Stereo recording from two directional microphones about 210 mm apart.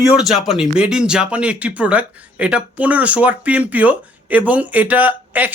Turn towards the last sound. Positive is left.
turn(degrees=-10)  # may be behind; listen again after turning